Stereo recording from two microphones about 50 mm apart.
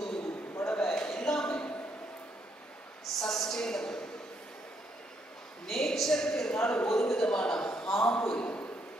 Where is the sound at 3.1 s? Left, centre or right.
Centre.